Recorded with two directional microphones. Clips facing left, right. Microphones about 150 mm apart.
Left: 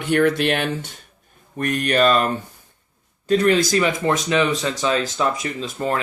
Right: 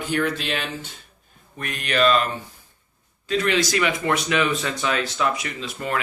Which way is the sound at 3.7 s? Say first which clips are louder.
Left 3 dB; 30° left (ahead or behind).